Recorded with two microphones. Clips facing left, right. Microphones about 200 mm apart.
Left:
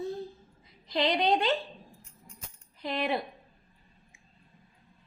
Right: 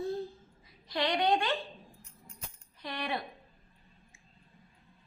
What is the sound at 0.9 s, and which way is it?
Speech, 20° left (ahead or behind).